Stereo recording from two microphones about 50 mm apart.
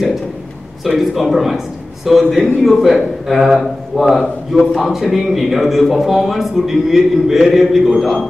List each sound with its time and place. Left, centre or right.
0.8 s a man's voice: centre